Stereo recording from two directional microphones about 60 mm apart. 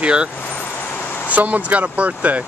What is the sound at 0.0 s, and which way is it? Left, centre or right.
Speech, centre.